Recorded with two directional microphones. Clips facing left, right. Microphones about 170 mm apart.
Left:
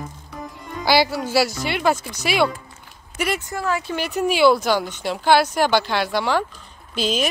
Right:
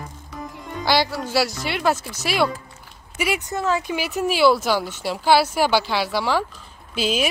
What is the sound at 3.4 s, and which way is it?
Speech, 20° right (ahead or behind).